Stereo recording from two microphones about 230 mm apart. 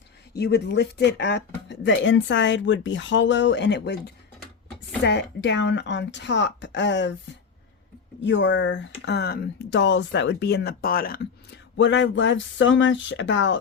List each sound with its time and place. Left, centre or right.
0.3 s speech: left
8.2 s speech: left
11.8 s speech: left